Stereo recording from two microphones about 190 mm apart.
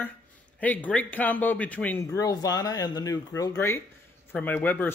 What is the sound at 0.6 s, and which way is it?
Speech, 10° left (ahead or behind).